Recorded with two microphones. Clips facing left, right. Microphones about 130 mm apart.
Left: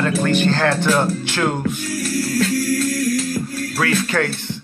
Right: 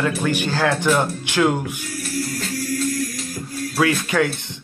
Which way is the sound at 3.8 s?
15° right (ahead or behind).